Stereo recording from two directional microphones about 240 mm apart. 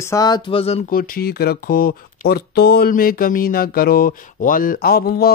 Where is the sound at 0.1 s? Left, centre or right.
Centre.